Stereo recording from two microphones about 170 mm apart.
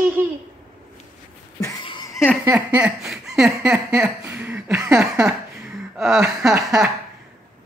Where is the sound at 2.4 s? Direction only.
10° right (ahead or behind).